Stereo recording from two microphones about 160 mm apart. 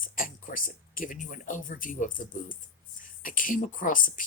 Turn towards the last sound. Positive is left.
turn(degrees=55)  # may be behind; listen again after turning